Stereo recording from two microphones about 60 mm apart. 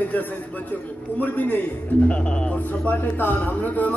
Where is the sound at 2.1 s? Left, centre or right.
Centre.